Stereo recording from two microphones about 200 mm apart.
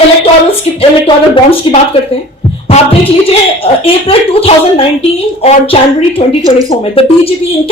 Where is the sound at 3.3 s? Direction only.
30° left (ahead or behind).